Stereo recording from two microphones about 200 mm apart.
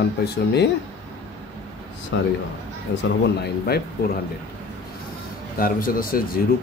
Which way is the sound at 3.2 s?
55° left (ahead or behind).